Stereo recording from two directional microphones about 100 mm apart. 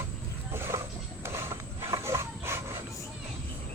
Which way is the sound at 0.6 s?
25° right (ahead or behind).